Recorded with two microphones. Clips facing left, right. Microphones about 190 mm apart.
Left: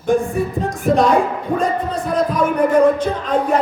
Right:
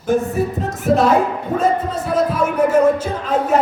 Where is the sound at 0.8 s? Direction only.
5° right (ahead or behind).